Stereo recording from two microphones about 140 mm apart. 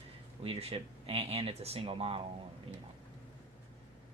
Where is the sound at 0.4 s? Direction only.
45° right (ahead or behind).